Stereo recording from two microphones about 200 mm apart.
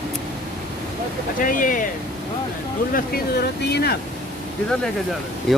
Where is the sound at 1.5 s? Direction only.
40° left (ahead or behind).